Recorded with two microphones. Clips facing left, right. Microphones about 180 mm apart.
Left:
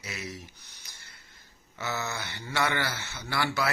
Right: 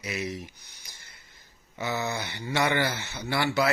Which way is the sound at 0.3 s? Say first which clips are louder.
Right 6 dB; 15° right (ahead or behind).